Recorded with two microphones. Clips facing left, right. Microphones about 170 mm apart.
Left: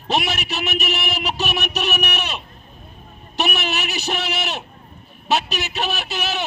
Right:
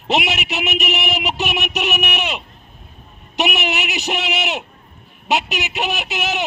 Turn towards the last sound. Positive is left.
turn(degrees=-20)  # may be behind; listen again after turning